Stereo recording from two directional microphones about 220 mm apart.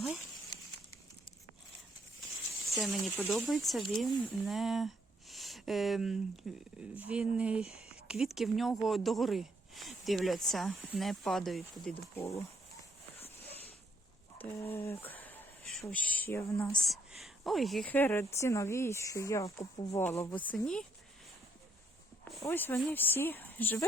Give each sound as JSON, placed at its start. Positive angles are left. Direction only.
{"t": 0.5, "sound": "a sound", "side_deg": 15}
{"t": 2.7, "sound": "speech", "side_deg": 0}
{"t": 7.6, "sound": "speech", "side_deg": 30}
{"t": 8.0, "sound": "speech", "side_deg": 0}
{"t": 14.7, "sound": "speech", "side_deg": 10}
{"t": 16.8, "sound": "a woman's voice", "side_deg": 0}
{"t": 22.2, "sound": "a sound", "side_deg": 0}
{"t": 22.4, "sound": "a woman's voice", "side_deg": 10}